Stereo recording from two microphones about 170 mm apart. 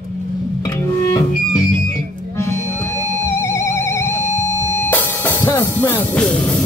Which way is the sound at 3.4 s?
15° left (ahead or behind).